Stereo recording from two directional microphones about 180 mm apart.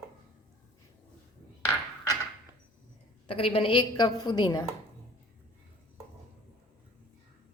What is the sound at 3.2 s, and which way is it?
A woman's voice, 30° left (ahead or behind).